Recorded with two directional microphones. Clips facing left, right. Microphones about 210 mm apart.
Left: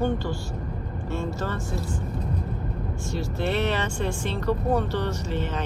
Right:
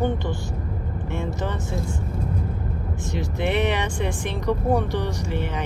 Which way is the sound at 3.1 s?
15° right (ahead or behind).